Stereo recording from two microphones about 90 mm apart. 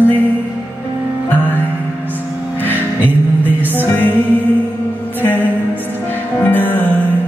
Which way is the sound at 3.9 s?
20° left (ahead or behind).